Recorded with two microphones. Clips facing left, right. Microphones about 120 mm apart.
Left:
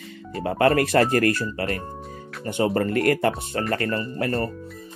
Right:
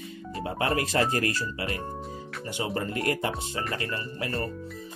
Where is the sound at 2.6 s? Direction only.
50° left (ahead or behind).